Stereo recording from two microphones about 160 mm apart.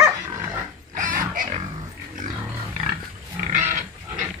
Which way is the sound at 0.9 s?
55° right (ahead or behind).